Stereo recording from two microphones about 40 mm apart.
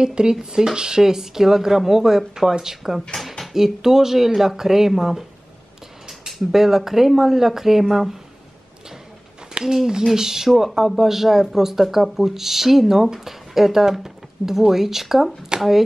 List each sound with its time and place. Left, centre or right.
0.0 s speech: right
9.7 s speech: centre